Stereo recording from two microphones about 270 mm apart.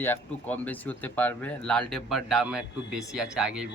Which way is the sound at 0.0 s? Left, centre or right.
Centre.